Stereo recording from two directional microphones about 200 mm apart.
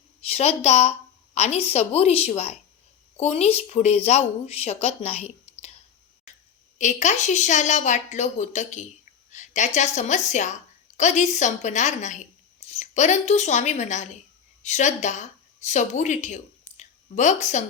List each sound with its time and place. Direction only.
0.3 s a woman's voice: 30° left (ahead or behind)
6.7 s a woman's voice: 35° left (ahead or behind)